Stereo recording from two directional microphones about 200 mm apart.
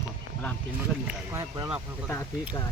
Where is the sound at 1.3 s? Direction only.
15° right (ahead or behind).